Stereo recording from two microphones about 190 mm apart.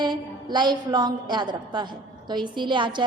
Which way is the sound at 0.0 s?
20° right (ahead or behind).